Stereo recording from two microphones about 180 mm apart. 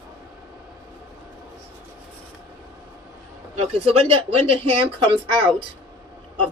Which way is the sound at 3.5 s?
35° right (ahead or behind).